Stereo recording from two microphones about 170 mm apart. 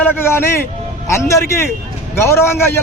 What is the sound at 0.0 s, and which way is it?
A man's voice, 15° left (ahead or behind).